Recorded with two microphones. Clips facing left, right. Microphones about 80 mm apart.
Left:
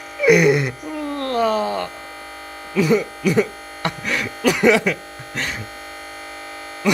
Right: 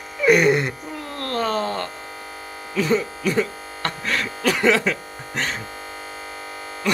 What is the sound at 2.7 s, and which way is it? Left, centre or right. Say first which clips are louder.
Speech: left 3 dB; centre.